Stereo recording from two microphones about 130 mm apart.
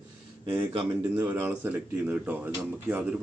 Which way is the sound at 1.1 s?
15° right (ahead or behind).